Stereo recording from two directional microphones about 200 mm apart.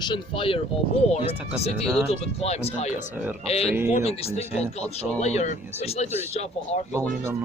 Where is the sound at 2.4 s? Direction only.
30° left (ahead or behind).